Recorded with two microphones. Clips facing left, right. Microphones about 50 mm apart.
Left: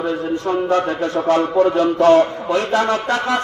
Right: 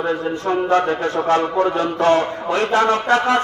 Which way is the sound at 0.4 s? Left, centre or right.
Right.